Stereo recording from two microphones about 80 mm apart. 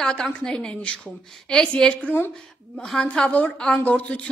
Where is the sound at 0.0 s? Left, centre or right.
Centre.